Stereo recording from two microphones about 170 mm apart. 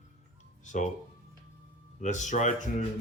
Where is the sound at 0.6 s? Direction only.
45° left (ahead or behind).